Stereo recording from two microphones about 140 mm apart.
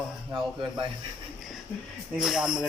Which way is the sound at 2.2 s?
5° right (ahead or behind).